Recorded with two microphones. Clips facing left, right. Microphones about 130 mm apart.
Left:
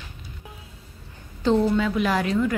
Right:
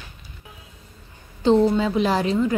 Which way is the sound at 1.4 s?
30° right (ahead or behind).